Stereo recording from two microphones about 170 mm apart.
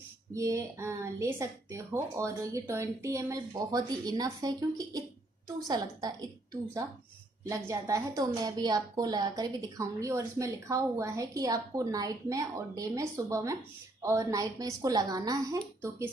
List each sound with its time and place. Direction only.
0.3 s a woman's voice: 20° right (ahead or behind)